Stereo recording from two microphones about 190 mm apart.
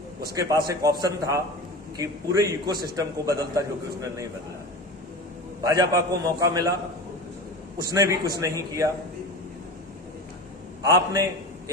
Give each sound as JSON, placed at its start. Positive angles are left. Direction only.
{"t": 0.3, "sound": "a man's voice", "side_deg": -15}
{"t": 5.6, "sound": "a man's voice", "side_deg": -20}
{"t": 7.8, "sound": "a man's voice", "side_deg": -15}
{"t": 10.8, "sound": "a man's voice", "side_deg": -15}